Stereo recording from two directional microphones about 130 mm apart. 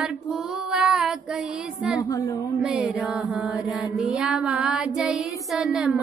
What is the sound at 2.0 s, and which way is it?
Speech, 25° left (ahead or behind).